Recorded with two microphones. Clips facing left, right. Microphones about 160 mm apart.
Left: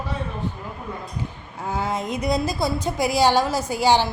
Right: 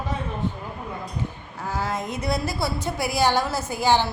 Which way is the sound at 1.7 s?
20° left (ahead or behind).